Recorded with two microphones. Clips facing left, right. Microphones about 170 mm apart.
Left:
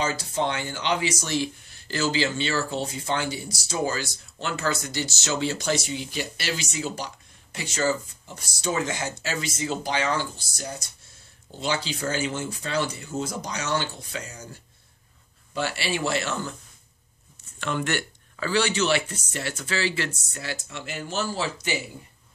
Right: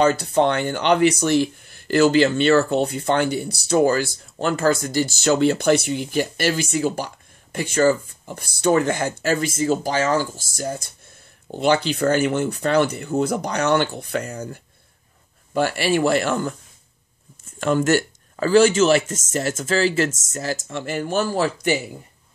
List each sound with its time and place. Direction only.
0.0 s speech: 60° right (ahead or behind)
11.5 s speech: 60° right (ahead or behind)